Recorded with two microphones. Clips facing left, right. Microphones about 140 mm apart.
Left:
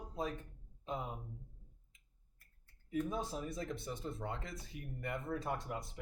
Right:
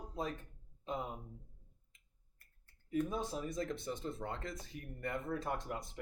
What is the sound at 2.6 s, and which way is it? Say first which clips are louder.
Speech: right 2 dB; centre (ahead or behind).